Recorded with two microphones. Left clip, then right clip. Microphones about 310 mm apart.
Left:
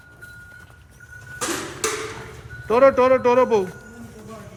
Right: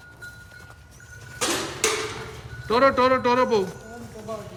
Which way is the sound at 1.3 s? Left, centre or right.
Centre.